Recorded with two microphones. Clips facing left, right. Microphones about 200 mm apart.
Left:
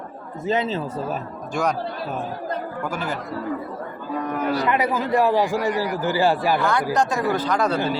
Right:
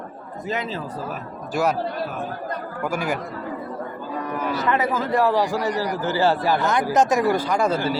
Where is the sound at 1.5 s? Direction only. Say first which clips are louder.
Right 2 dB; 5° right (ahead or behind).